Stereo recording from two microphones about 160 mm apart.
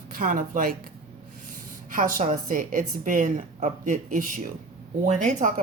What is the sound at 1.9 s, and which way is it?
A woman's voice, 55° right (ahead or behind).